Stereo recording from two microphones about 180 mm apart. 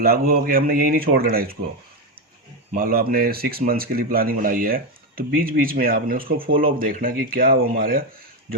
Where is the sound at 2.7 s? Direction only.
55° right (ahead or behind).